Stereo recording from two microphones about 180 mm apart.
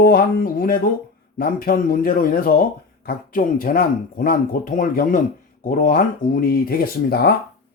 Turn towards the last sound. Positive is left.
turn(degrees=60)  # may be behind; listen again after turning